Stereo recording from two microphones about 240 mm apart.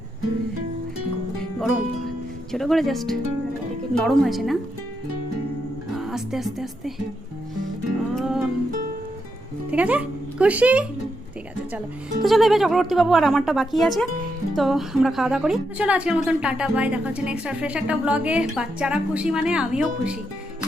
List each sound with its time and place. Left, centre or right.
1.4 s music: centre
2.5 s a woman's voice: centre
5.9 s speech: centre
8.1 s music: centre
9.7 s speech: centre
12.2 s a woman's voice: centre